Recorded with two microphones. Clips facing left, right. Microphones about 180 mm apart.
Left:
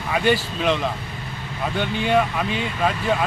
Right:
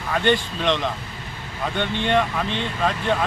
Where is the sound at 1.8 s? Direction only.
5° left (ahead or behind).